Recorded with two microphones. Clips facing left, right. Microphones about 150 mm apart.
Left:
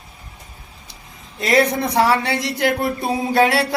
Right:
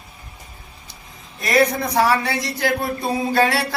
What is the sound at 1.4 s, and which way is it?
Speech, 25° left (ahead or behind).